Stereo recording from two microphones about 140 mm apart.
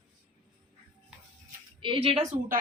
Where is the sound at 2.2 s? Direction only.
55° right (ahead or behind).